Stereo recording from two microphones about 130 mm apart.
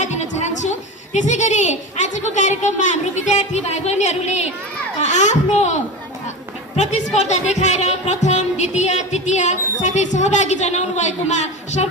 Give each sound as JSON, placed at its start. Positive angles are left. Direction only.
{"t": 0.0, "sound": "music", "side_deg": 60}
{"t": 7.5, "sound": "music", "side_deg": 60}